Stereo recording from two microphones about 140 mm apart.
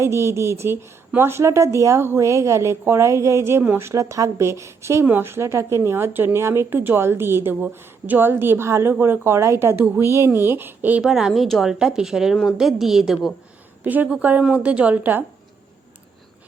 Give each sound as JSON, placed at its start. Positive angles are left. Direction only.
{"t": 0.0, "sound": "a woman's voice", "side_deg": -20}